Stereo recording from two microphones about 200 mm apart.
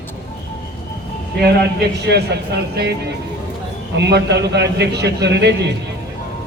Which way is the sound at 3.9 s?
60° right (ahead or behind).